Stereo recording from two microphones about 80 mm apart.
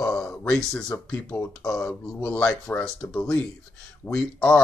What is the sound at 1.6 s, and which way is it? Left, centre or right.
Speech, centre.